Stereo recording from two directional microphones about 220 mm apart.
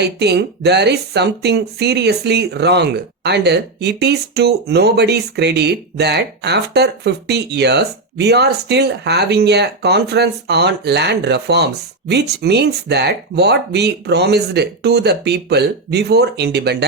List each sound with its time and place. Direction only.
0.0 s speech: 50° right (ahead or behind)